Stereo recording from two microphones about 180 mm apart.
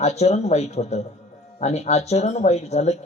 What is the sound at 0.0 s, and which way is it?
Speech, 35° left (ahead or behind).